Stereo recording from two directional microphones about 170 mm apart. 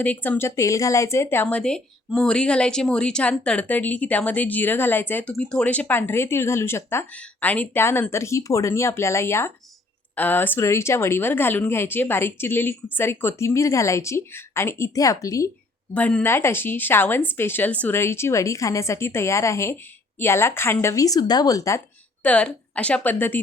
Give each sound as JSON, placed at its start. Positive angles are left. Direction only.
{"t": 0.0, "sound": "speech", "side_deg": 10}
{"t": 16.0, "sound": "speech", "side_deg": 10}
{"t": 22.2, "sound": "speech", "side_deg": 5}